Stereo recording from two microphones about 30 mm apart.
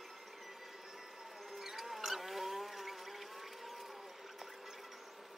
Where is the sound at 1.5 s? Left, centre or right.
Centre.